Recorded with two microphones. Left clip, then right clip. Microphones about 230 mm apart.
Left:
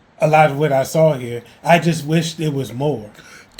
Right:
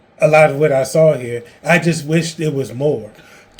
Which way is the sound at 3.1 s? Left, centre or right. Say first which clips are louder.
Left 1 dB; left.